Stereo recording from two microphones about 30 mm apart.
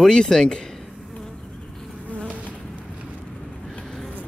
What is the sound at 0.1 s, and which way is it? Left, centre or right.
Speech, left.